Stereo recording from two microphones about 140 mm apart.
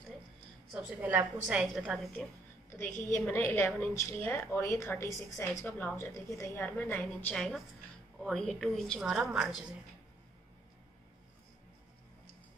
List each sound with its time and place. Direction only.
0.7 s a woman's voice: 10° right (ahead or behind)
2.7 s a woman's voice: 20° left (ahead or behind); by 9.6 s 5° right (ahead or behind)